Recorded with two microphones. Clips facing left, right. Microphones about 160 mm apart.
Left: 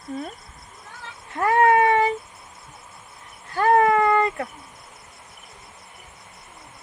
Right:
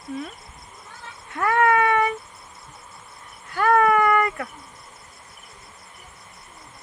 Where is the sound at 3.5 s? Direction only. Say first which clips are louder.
Left 1 dB; 30° left (ahead or behind).